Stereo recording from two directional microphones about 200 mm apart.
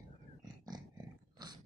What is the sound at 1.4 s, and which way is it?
Dog, 20° right (ahead or behind).